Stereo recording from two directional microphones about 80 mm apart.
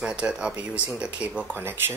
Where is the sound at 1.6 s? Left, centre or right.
Right.